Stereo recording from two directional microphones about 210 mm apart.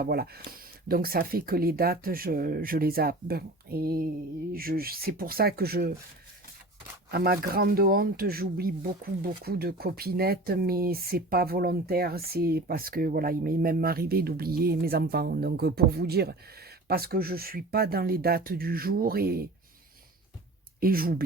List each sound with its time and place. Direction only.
0.0 s speech: 45° right (ahead or behind)
7.1 s speech: 50° right (ahead or behind)
20.8 s speech: 45° right (ahead or behind)